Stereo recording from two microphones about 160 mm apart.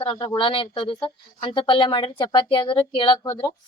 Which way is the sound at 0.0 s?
30° left (ahead or behind).